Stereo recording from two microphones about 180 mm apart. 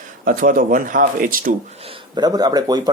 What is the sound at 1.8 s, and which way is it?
Speech, 25° right (ahead or behind).